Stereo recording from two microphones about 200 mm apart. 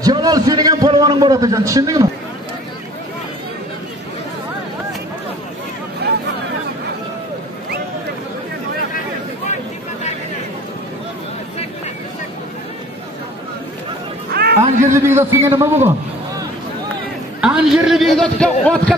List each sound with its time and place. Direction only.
0.0 s a man's voice: 20° right (ahead or behind)
6.0 s vehicle: 55° right (ahead or behind)
14.3 s a sound: 55° right (ahead or behind)
15.0 s a man's voice: 15° right (ahead or behind)
17.4 s a man's voice: 5° right (ahead or behind)